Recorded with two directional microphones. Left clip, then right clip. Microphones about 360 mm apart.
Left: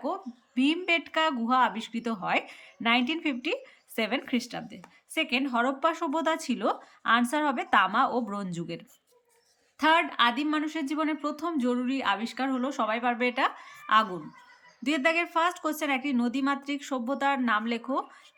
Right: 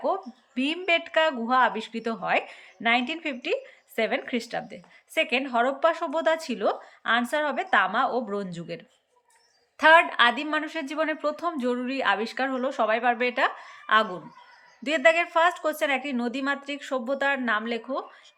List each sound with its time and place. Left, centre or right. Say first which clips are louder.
0.0 s speech: right 6 dB; centre